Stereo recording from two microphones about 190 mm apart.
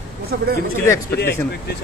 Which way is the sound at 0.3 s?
50° right (ahead or behind).